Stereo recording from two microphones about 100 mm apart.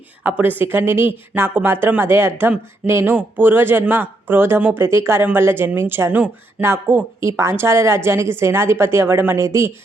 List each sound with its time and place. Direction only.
0.2 s speech: 15° right (ahead or behind)